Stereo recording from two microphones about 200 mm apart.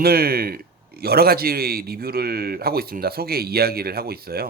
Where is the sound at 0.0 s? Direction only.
50° right (ahead or behind).